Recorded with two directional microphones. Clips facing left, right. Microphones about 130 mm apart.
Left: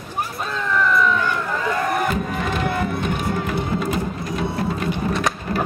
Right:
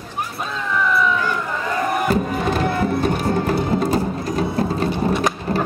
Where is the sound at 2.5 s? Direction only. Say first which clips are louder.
Right 3 dB; 35° right (ahead or behind).